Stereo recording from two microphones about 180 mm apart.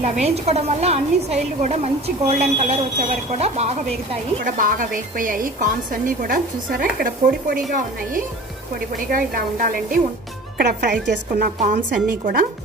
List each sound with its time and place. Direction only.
0.0 s a woman's voice: 40° right (ahead or behind)
9.1 s a woman's voice: 55° right (ahead or behind)
10.6 s a woman's voice: 65° right (ahead or behind); by 12.4 s 50° right (ahead or behind)